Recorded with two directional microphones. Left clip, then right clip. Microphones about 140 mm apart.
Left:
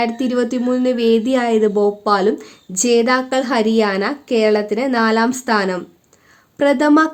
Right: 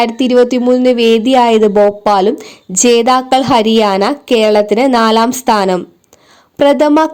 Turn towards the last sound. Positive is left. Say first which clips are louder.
# right 5 dB
turn(degrees=-45)  # may be behind; listen again after turning